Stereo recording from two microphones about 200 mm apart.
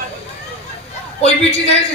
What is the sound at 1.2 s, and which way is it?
Speech, 30° left (ahead or behind).